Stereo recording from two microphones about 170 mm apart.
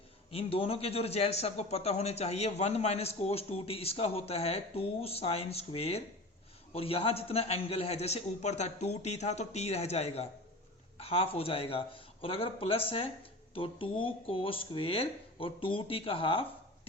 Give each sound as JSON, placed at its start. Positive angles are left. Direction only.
{"t": 0.3, "sound": "a man's voice", "side_deg": 35}